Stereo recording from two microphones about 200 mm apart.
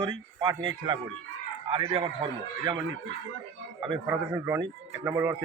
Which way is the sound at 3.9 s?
15° right (ahead or behind).